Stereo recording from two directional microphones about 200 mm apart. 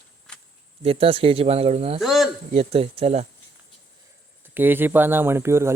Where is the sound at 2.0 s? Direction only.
Centre (ahead or behind).